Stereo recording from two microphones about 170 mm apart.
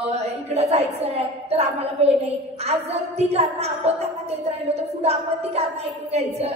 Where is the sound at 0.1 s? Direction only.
35° right (ahead or behind).